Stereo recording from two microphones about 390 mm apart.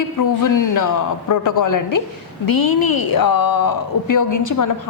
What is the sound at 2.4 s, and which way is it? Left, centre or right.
A woman's voice, left.